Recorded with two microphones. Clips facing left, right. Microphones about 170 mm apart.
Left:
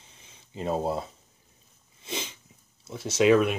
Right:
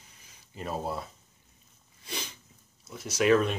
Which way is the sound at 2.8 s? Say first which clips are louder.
Left 4 dB; 25° left (ahead or behind).